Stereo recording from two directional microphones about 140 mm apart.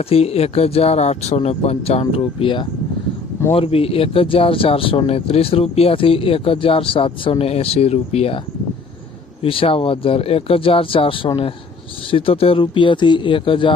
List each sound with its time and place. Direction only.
0.0 s speech: 45° left (ahead or behind)
9.4 s speech: 40° left (ahead or behind)